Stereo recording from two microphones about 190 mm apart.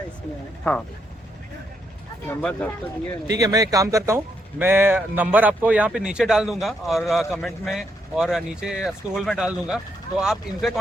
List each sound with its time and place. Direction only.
2.2 s speech: 5° left (ahead or behind)
3.3 s a man's voice: 20° right (ahead or behind); by 10.7 s 5° right (ahead or behind)